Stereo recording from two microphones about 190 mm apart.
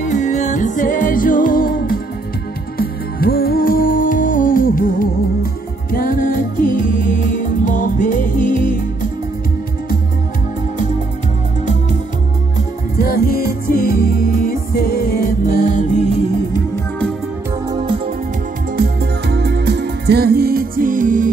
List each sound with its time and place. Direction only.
0.0 s music: 40° left (ahead or behind)
12.9 s music: 50° left (ahead or behind)
17.6 s music: 25° right (ahead or behind)
18.8 s music: 55° right (ahead or behind)